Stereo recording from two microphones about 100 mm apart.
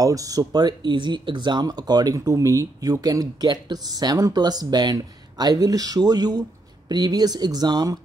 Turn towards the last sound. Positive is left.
turn(degrees=-45)  # may be behind; listen again after turning